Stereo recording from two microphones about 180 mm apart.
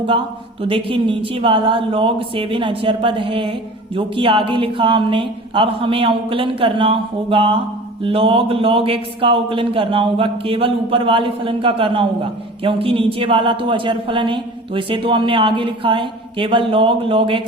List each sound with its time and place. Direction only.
0.7 s speech: 30° right (ahead or behind)